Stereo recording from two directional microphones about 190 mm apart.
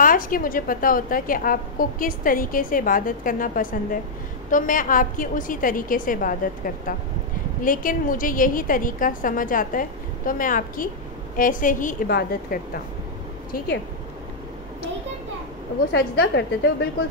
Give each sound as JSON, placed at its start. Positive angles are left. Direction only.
{"t": 0.0, "sound": "a woman's voice", "side_deg": 45}
{"t": 15.9, "sound": "a woman's voice", "side_deg": 65}